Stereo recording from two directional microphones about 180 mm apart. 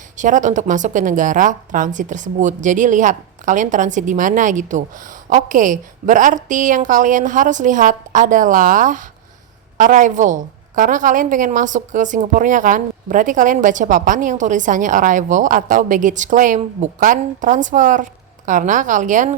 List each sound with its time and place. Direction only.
0.2 s a woman's voice: 45° right (ahead or behind)